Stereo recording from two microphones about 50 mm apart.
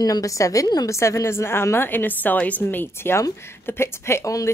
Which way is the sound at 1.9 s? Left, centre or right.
Left.